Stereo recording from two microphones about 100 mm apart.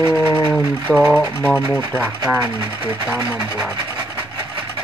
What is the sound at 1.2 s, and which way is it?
Speech, 20° left (ahead or behind).